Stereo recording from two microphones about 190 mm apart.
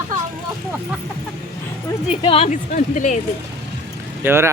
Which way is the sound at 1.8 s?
30° left (ahead or behind).